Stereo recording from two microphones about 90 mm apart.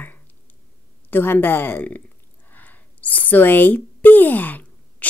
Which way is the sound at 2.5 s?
20° left (ahead or behind).